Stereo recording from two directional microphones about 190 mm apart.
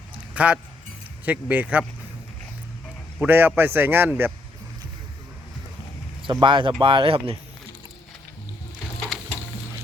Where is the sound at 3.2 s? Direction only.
10° right (ahead or behind).